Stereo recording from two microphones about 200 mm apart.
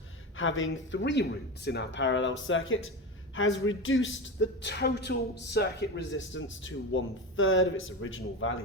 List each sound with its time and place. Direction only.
0.3 s speech: 75° left (ahead or behind); by 5.6 s 55° left (ahead or behind)
6.0 s a man's voice: 70° left (ahead or behind)